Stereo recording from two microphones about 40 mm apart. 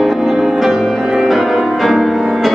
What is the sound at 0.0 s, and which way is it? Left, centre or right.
Music, centre.